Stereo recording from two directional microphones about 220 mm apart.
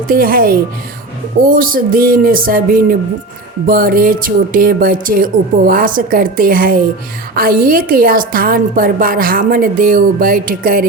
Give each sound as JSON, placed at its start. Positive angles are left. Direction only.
{"t": 0.1, "sound": "a woman's voice", "side_deg": -40}